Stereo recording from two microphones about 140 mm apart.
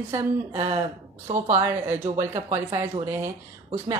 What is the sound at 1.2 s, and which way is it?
Speech, 50° right (ahead or behind).